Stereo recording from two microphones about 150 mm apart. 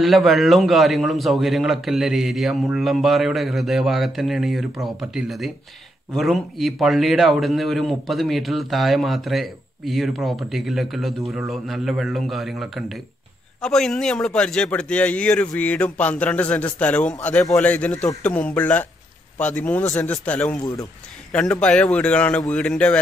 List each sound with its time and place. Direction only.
0.0 s a man's voice: centre (ahead or behind)